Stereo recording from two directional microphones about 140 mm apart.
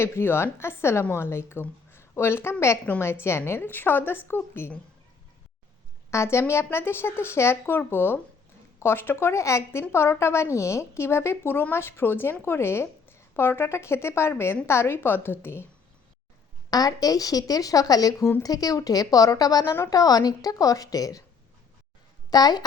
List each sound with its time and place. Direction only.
0.0 s a woman's voice: 15° left (ahead or behind)
6.1 s a woman's voice: 20° left (ahead or behind)
16.6 s speech: 25° left (ahead or behind)
22.3 s a woman's voice: 30° left (ahead or behind)